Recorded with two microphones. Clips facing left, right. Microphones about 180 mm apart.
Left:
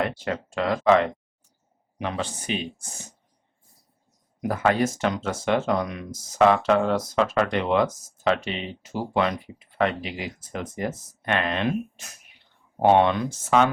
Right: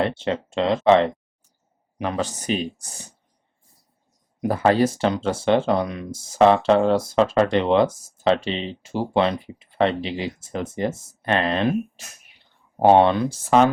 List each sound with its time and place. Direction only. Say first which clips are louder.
0.0 s speech: right 4 dB; 25° right (ahead or behind)
2.0 s speech: right 4 dB; 40° right (ahead or behind)
4.4 s speech: right 4 dB; 30° right (ahead or behind)